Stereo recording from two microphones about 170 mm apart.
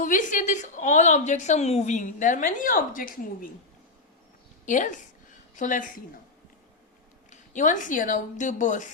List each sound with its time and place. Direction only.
0.0 s a woman's voice: 50° left (ahead or behind)
4.6 s a woman's voice: 50° left (ahead or behind)
7.3 s a woman's voice: 50° left (ahead or behind)